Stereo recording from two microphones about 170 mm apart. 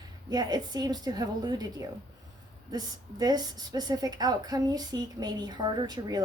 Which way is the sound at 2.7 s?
25° right (ahead or behind).